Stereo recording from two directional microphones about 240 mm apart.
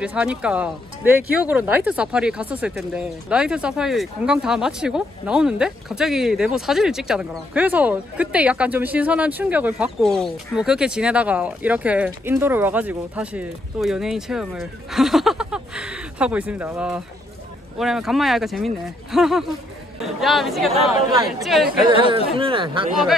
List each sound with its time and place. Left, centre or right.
0.0 s speech: centre
22.4 s speech: right